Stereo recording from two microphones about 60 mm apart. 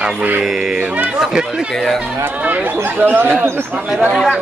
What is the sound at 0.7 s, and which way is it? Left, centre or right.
Speech, right.